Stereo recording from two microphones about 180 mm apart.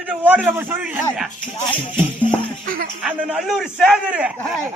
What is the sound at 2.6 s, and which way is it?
Music, 55° right (ahead or behind).